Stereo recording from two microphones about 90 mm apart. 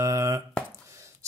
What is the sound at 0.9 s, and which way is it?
Chopping, 35° right (ahead or behind).